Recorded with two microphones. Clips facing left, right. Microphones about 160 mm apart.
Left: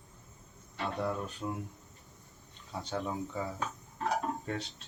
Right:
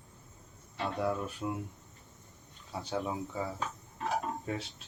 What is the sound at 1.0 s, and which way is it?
Speech, 5° right (ahead or behind).